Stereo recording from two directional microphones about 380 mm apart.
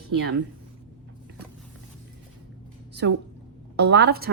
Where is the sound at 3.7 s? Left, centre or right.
Right.